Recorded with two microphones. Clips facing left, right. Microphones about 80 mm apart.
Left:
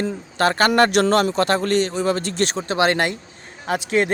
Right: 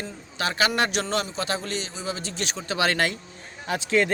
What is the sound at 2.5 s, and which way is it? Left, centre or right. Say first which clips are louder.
Speech: left 4 dB; left.